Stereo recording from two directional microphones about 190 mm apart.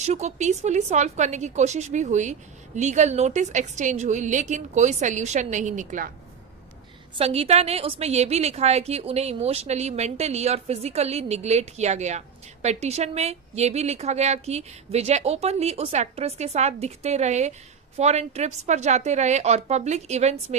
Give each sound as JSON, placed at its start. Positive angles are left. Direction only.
{"t": 0.0, "sound": "a woman's voice", "side_deg": -35}
{"t": 7.2, "sound": "a woman's voice", "side_deg": -30}